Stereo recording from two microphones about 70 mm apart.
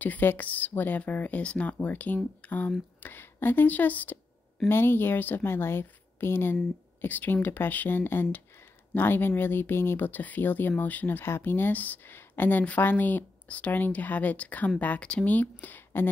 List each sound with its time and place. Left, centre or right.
0.0 s a woman's voice: left